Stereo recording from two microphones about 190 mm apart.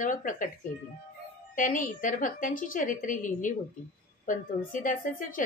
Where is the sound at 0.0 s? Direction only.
45° left (ahead or behind).